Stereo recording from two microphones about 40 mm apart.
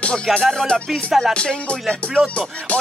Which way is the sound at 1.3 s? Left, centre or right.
Left.